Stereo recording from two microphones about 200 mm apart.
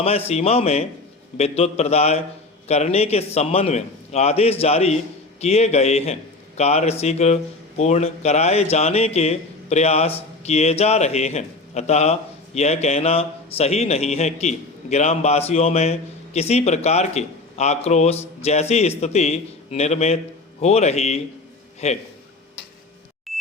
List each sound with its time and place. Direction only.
0.0 s a man's voice: 30° left (ahead or behind)